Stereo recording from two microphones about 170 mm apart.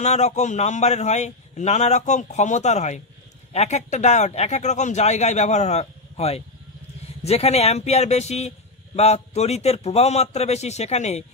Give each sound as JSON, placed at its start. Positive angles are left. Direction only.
{"t": 0.0, "sound": "a man's voice", "side_deg": 40}